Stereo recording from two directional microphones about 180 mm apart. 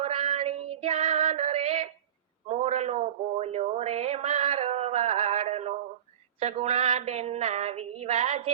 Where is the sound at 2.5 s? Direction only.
40° right (ahead or behind).